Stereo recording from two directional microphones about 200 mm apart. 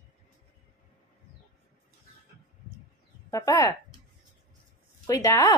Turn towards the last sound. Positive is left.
turn(degrees=15)  # may be behind; listen again after turning